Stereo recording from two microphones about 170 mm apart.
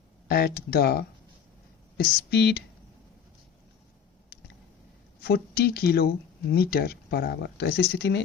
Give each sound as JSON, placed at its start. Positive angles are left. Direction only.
{"t": 0.3, "sound": "speech", "side_deg": 65}
{"t": 5.2, "sound": "speech", "side_deg": 70}